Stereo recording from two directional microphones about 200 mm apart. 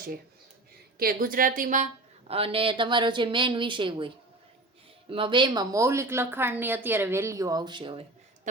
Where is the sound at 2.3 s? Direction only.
30° right (ahead or behind).